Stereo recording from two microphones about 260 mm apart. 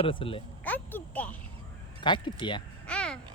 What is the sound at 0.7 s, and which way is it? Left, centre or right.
Speech, centre.